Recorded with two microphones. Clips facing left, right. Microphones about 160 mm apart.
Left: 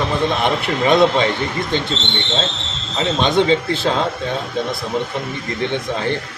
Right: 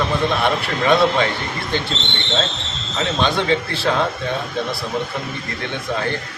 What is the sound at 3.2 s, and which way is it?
Speech, 20° left (ahead or behind).